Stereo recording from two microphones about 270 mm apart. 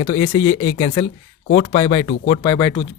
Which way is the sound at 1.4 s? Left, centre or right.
Left.